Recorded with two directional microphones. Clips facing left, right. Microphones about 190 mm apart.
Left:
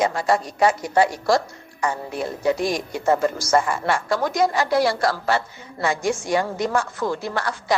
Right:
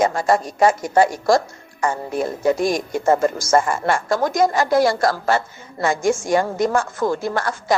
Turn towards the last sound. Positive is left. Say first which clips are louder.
# right 3 dB
turn(degrees=-45)  # may be behind; listen again after turning